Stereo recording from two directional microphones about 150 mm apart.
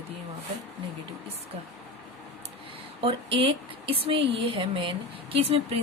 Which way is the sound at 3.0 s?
35° right (ahead or behind).